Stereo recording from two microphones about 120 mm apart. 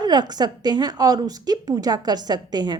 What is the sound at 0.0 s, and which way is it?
A woman's voice, 35° right (ahead or behind).